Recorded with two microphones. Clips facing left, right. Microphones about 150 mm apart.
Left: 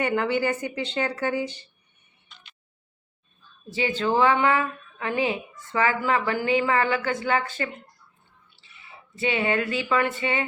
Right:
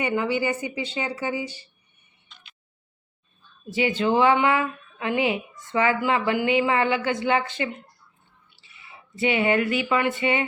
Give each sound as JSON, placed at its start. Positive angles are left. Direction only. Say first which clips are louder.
{"t": 0.0, "sound": "speech", "louder": "even", "side_deg": -10}
{"t": 3.8, "sound": "a woman's voice", "louder": "right 3 dB", "side_deg": 30}
{"t": 4.0, "sound": "speech", "louder": "right 1 dB", "side_deg": -25}
{"t": 5.0, "sound": "a woman's voice", "louder": "right 2 dB", "side_deg": 30}
{"t": 5.7, "sound": "speech", "louder": "right 1 dB", "side_deg": -20}
{"t": 6.3, "sound": "a woman's voice", "louder": "right 1 dB", "side_deg": 40}
{"t": 6.6, "sound": "speech", "louder": "right 1 dB", "side_deg": -25}
{"t": 9.3, "sound": "speech", "louder": "right 3 dB", "side_deg": -25}